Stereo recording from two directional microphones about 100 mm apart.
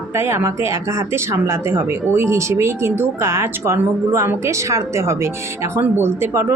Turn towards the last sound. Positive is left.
turn(degrees=-25)  # may be behind; listen again after turning